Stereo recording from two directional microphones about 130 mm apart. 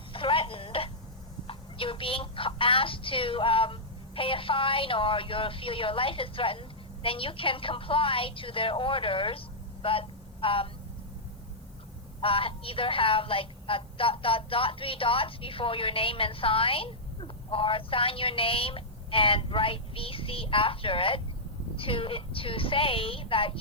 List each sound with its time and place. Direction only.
0.1 s telephone: 45° left (ahead or behind)
1.5 s a woman's voice: 45° left (ahead or behind)
9.8 s a sound: 45° left (ahead or behind)
12.2 s a woman's voice: 45° left (ahead or behind)